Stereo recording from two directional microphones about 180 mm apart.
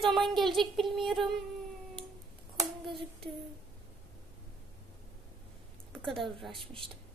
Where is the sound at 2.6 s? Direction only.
25° right (ahead or behind).